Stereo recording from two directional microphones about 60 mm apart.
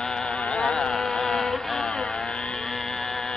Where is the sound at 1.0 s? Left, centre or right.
Centre.